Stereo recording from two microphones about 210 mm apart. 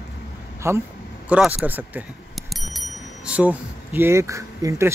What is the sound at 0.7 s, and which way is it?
Speech, 10° right (ahead or behind).